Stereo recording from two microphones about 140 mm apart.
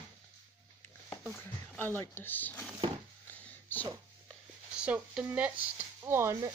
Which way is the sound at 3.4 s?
10° left (ahead or behind).